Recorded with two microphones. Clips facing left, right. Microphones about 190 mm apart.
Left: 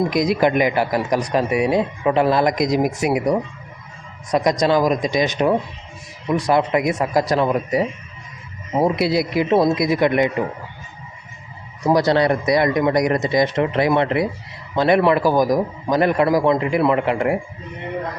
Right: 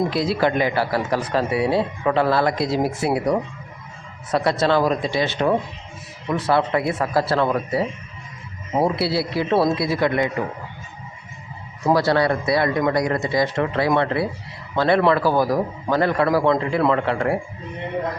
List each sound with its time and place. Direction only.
0.1 s speech: 15° left (ahead or behind)
11.9 s a man's voice: 20° left (ahead or behind)